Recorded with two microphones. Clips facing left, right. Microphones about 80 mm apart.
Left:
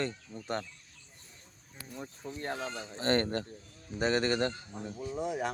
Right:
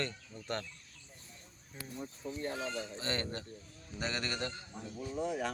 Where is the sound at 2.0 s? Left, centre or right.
Left.